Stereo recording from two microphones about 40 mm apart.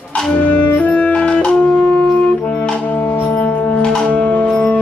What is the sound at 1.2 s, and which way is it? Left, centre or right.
Wind instrument, left.